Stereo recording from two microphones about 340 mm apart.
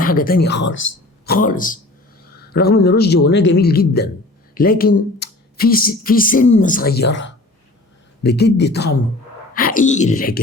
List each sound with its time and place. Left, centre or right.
0.0 s a man's voice: left